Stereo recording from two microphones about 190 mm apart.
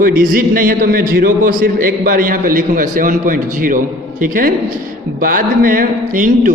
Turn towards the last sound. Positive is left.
turn(degrees=-45)  # may be behind; listen again after turning